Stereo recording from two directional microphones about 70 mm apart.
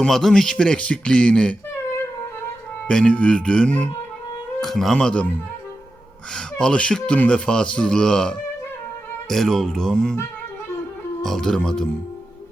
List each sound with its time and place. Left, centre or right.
0.0 s speech: centre
2.8 s speech: centre
4.6 s speech: centre
4.9 s speech: centre
6.3 s speech: centre
11.2 s speech: centre